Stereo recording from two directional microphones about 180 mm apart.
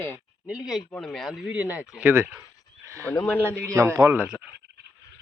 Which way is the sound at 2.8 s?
15° right (ahead or behind).